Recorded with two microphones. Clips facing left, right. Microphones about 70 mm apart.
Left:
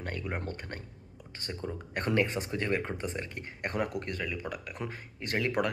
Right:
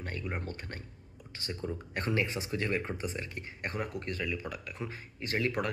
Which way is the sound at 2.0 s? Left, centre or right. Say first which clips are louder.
Left 4 dB; left.